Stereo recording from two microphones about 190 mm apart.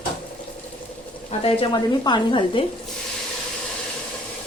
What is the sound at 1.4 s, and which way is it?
Speech, 25° left (ahead or behind).